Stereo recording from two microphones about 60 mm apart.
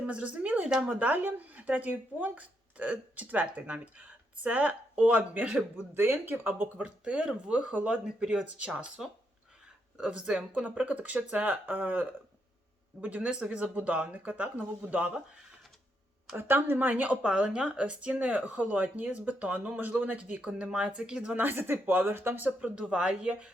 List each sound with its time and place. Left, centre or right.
0.0 s speech: centre; by 6.7 s right
6.7 s speech: centre
8.0 s speech: centre
10.0 s speech: centre
16.3 s speech: right
17.2 s speech: centre
21.3 s speech: right
22.9 s speech: centre